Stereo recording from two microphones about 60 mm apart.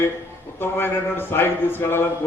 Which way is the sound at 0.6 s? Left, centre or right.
Left.